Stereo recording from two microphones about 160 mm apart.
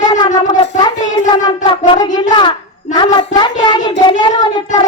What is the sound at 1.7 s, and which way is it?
Speech, 30° left (ahead or behind).